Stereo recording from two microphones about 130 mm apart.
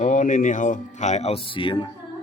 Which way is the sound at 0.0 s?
75° left (ahead or behind).